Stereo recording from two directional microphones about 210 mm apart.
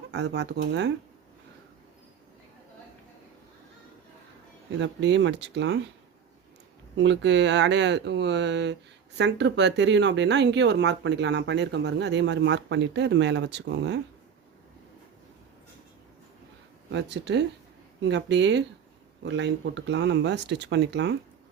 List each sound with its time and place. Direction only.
0.1 s speech: 55° right (ahead or behind)
4.8 s speech: 60° right (ahead or behind)
6.9 s speech: 60° right (ahead or behind)
16.9 s speech: 55° right (ahead or behind)